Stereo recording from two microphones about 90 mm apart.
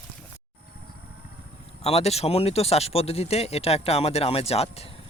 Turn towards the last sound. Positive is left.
turn(degrees=90)